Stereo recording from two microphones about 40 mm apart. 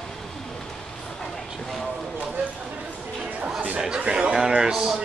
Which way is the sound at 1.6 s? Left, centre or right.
Centre.